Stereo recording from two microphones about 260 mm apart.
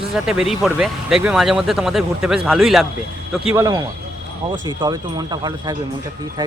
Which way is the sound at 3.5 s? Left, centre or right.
Centre.